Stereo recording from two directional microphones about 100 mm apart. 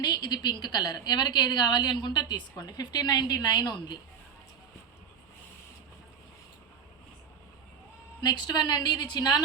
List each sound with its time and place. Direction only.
0.0 s a woman's voice: 45° left (ahead or behind)
8.2 s a woman's voice: 45° left (ahead or behind)